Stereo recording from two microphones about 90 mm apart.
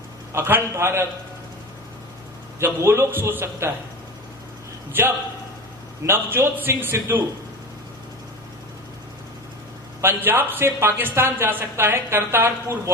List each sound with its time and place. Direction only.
0.3 s speech: 25° right (ahead or behind)
2.6 s speech: 30° right (ahead or behind)
4.9 s speech: 25° right (ahead or behind)
10.0 s speech: 25° right (ahead or behind)